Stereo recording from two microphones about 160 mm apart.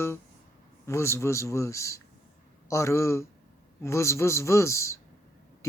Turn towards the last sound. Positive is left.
turn(degrees=20)  # may be behind; listen again after turning